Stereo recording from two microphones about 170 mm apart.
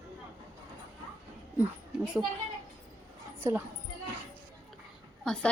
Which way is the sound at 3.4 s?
15° right (ahead or behind).